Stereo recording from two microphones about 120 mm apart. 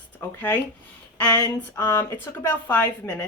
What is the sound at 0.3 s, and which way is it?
A woman's voice, 15° left (ahead or behind).